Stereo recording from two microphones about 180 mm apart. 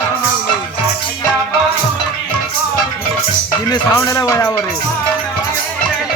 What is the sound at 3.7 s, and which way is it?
Speech, 20° left (ahead or behind).